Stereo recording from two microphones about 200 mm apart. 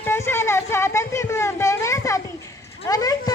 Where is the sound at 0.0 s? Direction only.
10° left (ahead or behind).